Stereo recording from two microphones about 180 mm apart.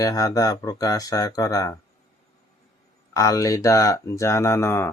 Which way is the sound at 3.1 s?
20° left (ahead or behind).